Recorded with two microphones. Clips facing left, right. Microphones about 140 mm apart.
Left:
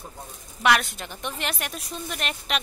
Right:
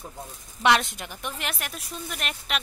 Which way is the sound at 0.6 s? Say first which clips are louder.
Even; 20° right (ahead or behind).